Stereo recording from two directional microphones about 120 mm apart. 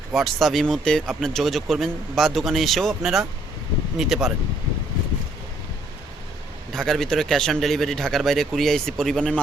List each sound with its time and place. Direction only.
0.1 s speech: centre (ahead or behind)
6.7 s speech: centre (ahead or behind)